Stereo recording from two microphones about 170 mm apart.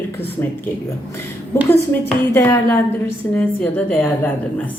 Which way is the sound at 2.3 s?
15° left (ahead or behind).